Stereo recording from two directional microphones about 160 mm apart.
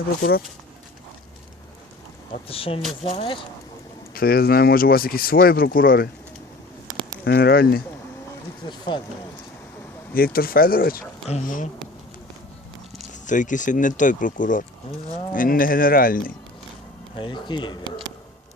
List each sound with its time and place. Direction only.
0.2 s speech: 70° left (ahead or behind)
2.5 s speech: 35° left (ahead or behind)
4.1 s speech: 70° left (ahead or behind)
7.3 s speech: 75° left (ahead or behind)
8.6 s speech: 25° left (ahead or behind)
10.2 s speech: 65° left (ahead or behind)
13.2 s speech: 50° left (ahead or behind)
17.2 s speech: 30° left (ahead or behind)